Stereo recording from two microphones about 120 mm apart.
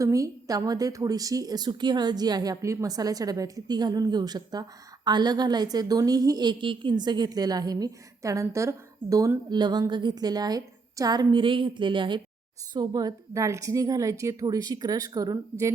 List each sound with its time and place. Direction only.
0.0 s a woman's voice: 25° right (ahead or behind)
9.5 s a woman's voice: 35° right (ahead or behind)